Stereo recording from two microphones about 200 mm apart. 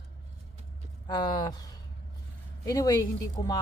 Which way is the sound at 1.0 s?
20° left (ahead or behind).